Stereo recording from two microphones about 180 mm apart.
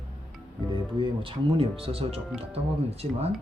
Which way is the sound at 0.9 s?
30° right (ahead or behind).